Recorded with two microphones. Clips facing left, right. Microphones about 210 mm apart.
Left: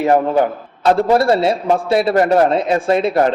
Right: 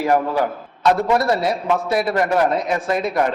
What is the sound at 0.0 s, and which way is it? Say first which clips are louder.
A man's voice: left 4 dB; 25° left (ahead or behind).